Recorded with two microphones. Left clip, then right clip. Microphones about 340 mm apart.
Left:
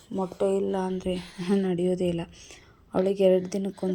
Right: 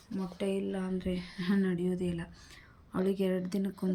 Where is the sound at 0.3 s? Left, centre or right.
Left.